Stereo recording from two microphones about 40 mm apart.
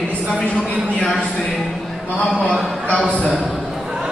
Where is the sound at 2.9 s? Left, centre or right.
Left.